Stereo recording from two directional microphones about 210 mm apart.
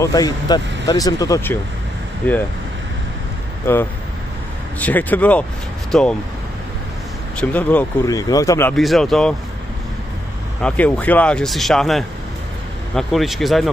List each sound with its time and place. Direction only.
0.0 s speech: 15° left (ahead or behind)
4.7 s speech: 10° left (ahead or behind)
7.3 s speech: 5° left (ahead or behind)
8.7 s speech: centre (ahead or behind)
10.6 s speech: 5° left (ahead or behind)